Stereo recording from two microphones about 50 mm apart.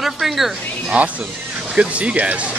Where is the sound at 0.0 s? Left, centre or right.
Centre.